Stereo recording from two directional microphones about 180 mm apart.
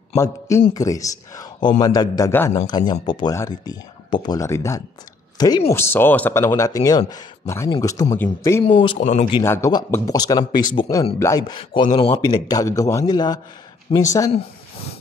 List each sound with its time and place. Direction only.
0.1 s a man's voice: 15° left (ahead or behind)
8.6 s speech: 30° left (ahead or behind)
9.0 s speech: 40° left (ahead or behind)
9.4 s speech: 15° left (ahead or behind)
13.9 s speech: 30° left (ahead or behind)